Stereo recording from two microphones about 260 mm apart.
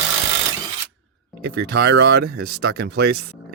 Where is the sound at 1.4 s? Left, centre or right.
Right.